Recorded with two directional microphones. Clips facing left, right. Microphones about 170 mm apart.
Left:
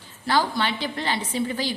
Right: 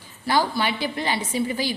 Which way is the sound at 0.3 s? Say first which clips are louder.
Right 1 dB; 10° right (ahead or behind).